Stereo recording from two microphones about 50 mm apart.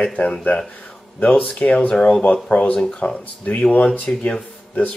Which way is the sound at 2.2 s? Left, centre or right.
Left.